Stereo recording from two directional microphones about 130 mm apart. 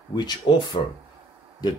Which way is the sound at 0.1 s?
35° left (ahead or behind).